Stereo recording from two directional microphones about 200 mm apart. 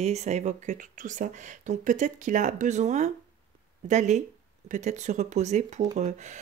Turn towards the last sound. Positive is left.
turn(degrees=-35)  # may be behind; listen again after turning